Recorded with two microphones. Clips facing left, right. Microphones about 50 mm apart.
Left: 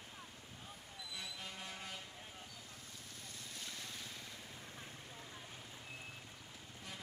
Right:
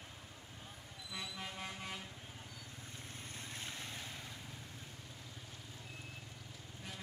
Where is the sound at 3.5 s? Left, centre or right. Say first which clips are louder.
Right 2 dB; right.